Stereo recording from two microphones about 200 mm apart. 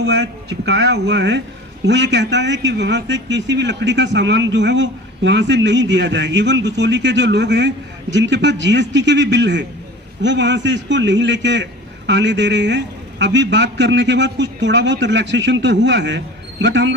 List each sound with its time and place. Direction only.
0.0 s a man's voice: 60° right (ahead or behind)